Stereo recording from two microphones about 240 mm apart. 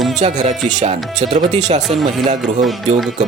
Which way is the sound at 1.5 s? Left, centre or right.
Right.